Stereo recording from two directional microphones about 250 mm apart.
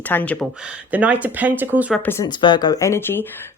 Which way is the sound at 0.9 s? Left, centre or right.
Centre.